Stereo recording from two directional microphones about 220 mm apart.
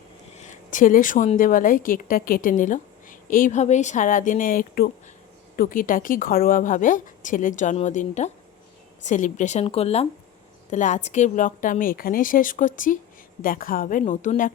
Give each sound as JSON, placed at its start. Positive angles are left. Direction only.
{"t": 0.3, "sound": "a woman's voice", "side_deg": 35}